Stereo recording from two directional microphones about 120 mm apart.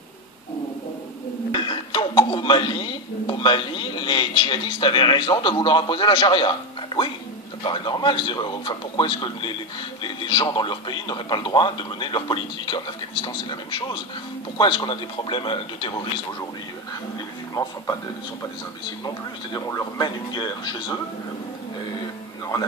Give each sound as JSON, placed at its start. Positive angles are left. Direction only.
{"t": 1.5, "sound": "a man's voice", "side_deg": 40}
{"t": 19.0, "sound": "speech", "side_deg": 30}